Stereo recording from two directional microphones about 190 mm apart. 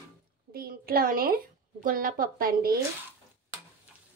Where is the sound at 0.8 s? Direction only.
50° right (ahead or behind).